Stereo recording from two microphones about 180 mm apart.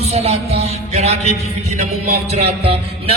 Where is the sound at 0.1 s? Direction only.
35° right (ahead or behind).